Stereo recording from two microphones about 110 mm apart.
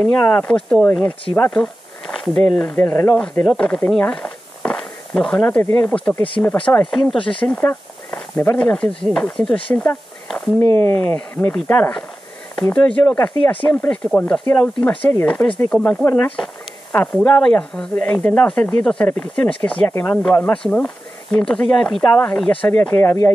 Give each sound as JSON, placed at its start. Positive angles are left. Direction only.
{"t": 0.2, "sound": "speech", "side_deg": 15}
{"t": 1.5, "sound": "a sound", "side_deg": 10}
{"t": 2.3, "sound": "speech", "side_deg": 10}
{"t": 2.9, "sound": "speech", "side_deg": 30}
{"t": 3.2, "sound": "speech", "side_deg": 10}
{"t": 7.2, "sound": "speech", "side_deg": 50}
{"t": 7.4, "sound": "a sound", "side_deg": 10}
{"t": 8.5, "sound": "speech", "side_deg": 10}
{"t": 10.2, "sound": "a sound", "side_deg": 0}
{"t": 11.0, "sound": "speech", "side_deg": 15}